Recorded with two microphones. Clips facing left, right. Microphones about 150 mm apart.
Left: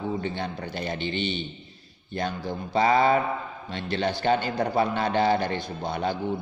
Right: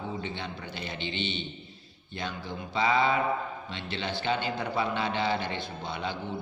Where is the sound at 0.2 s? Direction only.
45° left (ahead or behind).